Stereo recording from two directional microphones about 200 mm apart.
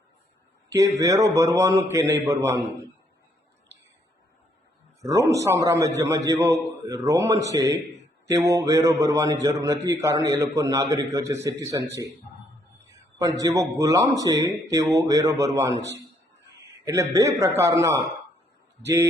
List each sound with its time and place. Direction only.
0.7 s a man's voice: 15° right (ahead or behind)
5.0 s a man's voice: 15° right (ahead or behind)
13.1 s a man's voice: 20° right (ahead or behind)
16.8 s a man's voice: 15° right (ahead or behind)